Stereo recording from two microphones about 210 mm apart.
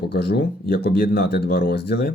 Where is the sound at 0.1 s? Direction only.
50° left (ahead or behind).